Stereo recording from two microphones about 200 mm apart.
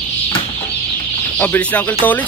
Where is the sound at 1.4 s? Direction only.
5° left (ahead or behind).